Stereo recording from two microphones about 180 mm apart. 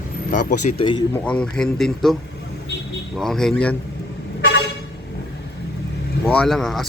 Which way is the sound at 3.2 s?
Centre (ahead or behind).